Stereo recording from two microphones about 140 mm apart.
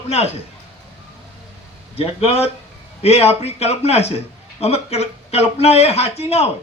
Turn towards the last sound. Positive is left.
turn(degrees=50)  # may be behind; listen again after turning